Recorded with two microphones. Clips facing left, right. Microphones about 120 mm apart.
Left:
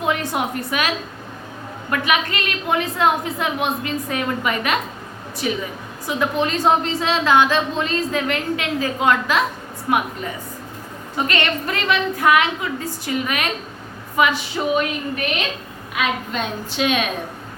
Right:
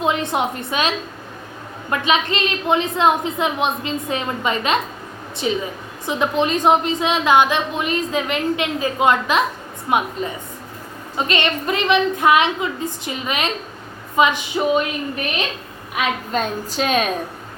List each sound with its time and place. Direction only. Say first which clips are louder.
0.0 s a woman's voice: right 2 dB; 20° right (ahead or behind)
16.3 s a woman's voice: right 3 dB; 40° right (ahead or behind)